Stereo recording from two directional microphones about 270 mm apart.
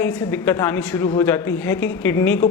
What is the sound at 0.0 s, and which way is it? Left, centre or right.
A man's voice, centre.